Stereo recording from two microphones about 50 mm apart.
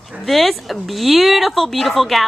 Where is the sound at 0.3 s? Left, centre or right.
Centre.